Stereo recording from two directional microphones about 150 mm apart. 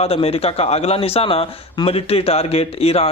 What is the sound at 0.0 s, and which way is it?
Speech, 40° left (ahead or behind).